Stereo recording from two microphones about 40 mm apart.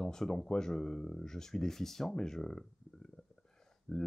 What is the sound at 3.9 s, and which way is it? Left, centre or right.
Speech, centre.